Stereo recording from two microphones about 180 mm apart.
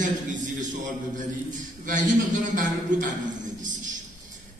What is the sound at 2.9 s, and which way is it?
Speech, 45° right (ahead or behind).